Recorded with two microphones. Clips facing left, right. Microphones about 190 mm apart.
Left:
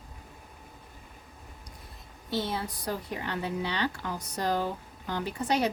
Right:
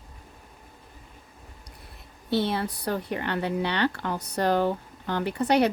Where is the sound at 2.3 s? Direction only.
65° right (ahead or behind).